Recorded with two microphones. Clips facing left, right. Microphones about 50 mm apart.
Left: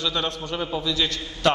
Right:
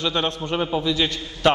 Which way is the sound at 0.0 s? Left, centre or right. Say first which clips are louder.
Right 3 dB; right.